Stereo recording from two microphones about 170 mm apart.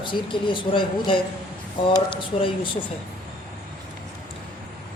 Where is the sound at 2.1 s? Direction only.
30° left (ahead or behind).